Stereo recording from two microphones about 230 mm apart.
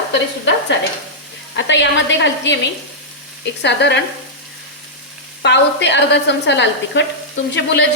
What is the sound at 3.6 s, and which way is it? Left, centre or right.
Speech, left.